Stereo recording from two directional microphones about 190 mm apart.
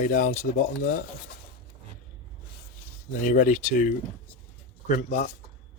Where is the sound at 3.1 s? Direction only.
45° left (ahead or behind).